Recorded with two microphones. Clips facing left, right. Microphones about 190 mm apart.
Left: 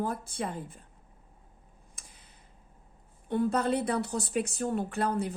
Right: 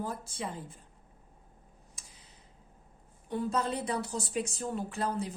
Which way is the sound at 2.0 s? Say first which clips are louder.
Left 4 dB; 55° left (ahead or behind).